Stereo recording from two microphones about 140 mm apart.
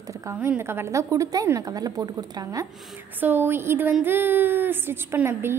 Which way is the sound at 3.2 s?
15° right (ahead or behind).